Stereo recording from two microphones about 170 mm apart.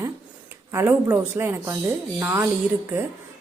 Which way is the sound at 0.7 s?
15° right (ahead or behind).